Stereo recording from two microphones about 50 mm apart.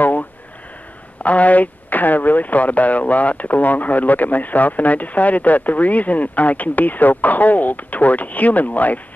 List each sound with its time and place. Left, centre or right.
1.2 s speech: left